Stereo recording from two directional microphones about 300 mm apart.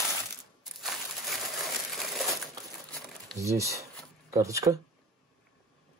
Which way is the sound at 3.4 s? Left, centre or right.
Centre.